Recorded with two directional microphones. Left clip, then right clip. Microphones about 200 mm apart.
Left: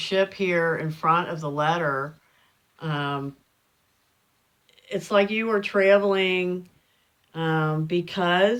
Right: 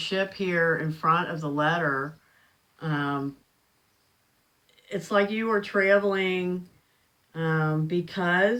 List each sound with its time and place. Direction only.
0.0 s speech: 35° left (ahead or behind)
4.6 s speech: 40° left (ahead or behind)